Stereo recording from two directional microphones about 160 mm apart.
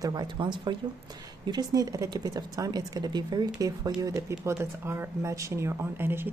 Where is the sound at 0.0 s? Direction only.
25° right (ahead or behind).